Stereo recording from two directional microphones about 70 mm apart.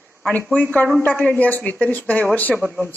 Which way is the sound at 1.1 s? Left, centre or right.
Centre.